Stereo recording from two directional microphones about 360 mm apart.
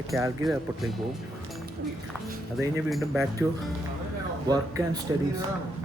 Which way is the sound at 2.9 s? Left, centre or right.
Centre.